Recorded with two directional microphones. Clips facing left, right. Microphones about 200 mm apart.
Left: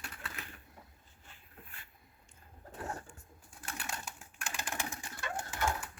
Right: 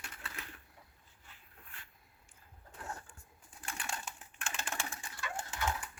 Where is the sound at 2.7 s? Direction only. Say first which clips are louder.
Left 4 dB; 35° left (ahead or behind).